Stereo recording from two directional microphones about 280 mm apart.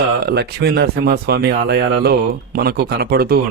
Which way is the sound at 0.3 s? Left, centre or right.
Right.